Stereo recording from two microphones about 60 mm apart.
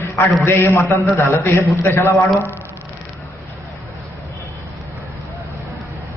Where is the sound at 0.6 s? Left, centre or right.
Left.